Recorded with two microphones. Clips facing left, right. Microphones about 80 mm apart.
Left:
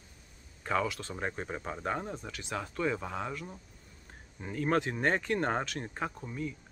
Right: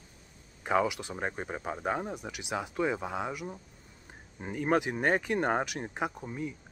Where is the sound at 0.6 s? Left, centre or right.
Centre.